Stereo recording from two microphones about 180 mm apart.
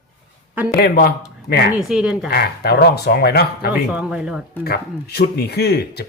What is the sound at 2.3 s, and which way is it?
Speech, 60° left (ahead or behind).